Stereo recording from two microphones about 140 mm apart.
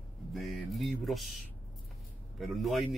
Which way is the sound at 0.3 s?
Centre (ahead or behind).